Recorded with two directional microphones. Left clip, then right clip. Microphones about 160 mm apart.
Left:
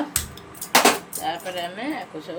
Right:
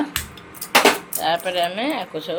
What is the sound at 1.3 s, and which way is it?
Speech, 30° right (ahead or behind).